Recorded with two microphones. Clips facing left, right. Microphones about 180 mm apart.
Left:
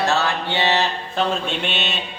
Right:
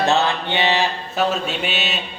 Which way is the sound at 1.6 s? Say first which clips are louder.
Right 1 dB; 5° right (ahead or behind).